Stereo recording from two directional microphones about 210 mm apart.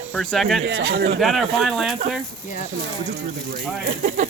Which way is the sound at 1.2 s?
Centre (ahead or behind).